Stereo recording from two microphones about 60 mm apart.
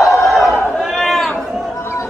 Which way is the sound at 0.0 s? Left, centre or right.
Left.